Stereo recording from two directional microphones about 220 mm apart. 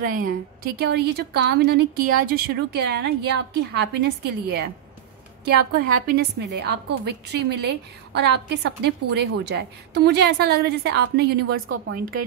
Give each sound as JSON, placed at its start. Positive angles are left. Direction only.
{"t": 0.0, "sound": "a woman's voice", "side_deg": -40}
{"t": 6.0, "sound": "a woman's voice", "side_deg": -45}